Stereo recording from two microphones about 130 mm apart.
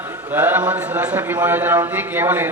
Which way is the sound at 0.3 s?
15° right (ahead or behind).